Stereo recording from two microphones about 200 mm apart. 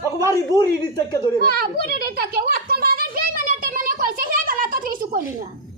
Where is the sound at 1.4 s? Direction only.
50° right (ahead or behind).